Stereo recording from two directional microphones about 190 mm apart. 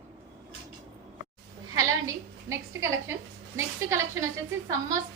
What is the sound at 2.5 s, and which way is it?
A woman's voice, 15° right (ahead or behind).